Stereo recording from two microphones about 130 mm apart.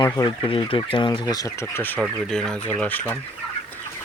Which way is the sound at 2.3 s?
5° left (ahead or behind).